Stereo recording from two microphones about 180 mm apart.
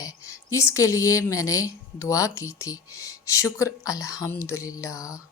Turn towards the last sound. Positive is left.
turn(degrees=15)  # may be behind; listen again after turning